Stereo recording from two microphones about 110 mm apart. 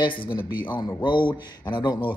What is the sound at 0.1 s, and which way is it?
Speech, 50° left (ahead or behind).